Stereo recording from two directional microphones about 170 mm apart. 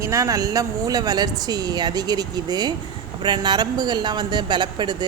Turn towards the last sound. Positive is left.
turn(degrees=-25)  # may be behind; listen again after turning